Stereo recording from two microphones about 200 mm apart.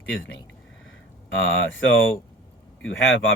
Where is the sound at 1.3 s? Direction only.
70° left (ahead or behind).